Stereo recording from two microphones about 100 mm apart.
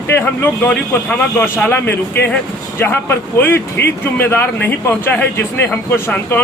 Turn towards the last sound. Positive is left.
turn(degrees=25)  # may be behind; listen again after turning